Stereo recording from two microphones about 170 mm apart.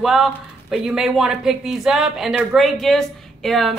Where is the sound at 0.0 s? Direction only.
Centre (ahead or behind).